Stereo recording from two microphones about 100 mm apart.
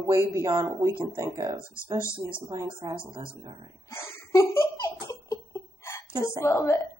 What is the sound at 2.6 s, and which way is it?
A woman's voice, 55° right (ahead or behind).